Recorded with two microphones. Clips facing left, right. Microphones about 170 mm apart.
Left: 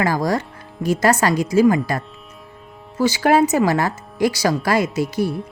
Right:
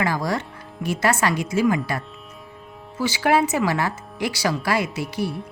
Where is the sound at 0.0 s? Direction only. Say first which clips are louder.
Left 4 dB; 40° left (ahead or behind).